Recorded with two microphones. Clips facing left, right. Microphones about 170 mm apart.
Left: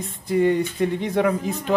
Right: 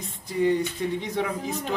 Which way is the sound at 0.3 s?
55° left (ahead or behind).